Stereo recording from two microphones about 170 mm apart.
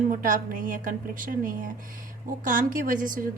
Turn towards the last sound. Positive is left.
turn(degrees=-55)  # may be behind; listen again after turning